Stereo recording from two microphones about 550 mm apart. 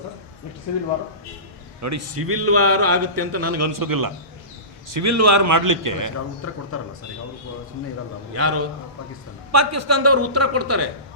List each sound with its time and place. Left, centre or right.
1.8 s a man's voice: right
6.4 s speech: left
8.3 s a man's voice: right